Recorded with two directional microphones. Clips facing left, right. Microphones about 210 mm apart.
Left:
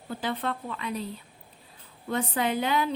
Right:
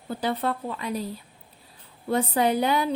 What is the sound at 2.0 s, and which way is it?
Speech, 35° right (ahead or behind).